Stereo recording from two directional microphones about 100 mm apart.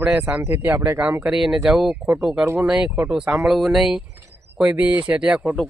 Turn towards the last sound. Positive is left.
turn(degrees=-10)  # may be behind; listen again after turning